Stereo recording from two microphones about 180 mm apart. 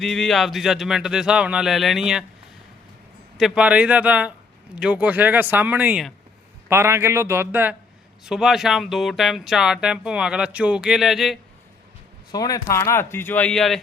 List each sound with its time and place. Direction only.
0.0 s speech: centre (ahead or behind)
3.3 s speech: centre (ahead or behind)
12.3 s speech: 20° left (ahead or behind); by 13.7 s 5° left (ahead or behind)